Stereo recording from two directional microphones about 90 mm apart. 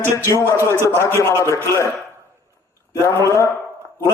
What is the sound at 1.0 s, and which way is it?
Speech, 30° left (ahead or behind).